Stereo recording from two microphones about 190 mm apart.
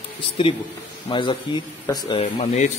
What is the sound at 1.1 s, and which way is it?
Speech, 25° left (ahead or behind).